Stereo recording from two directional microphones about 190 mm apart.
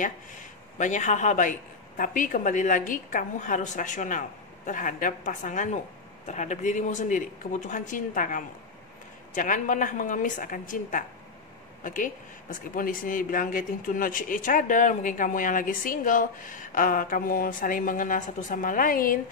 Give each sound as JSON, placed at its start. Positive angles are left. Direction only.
{"t": 0.7, "sound": "a woman's voice", "side_deg": 40}